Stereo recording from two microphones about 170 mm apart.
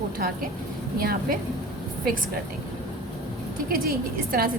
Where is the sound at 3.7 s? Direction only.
60° right (ahead or behind).